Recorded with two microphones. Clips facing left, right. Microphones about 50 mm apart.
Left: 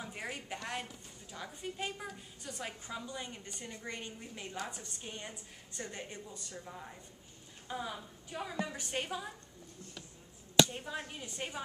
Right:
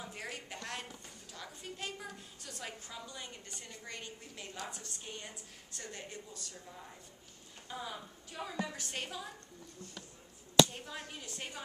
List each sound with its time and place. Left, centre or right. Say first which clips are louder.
0.0 s a woman's voice: left 2 dB; centre
10.7 s a woman's voice: left 4 dB; centre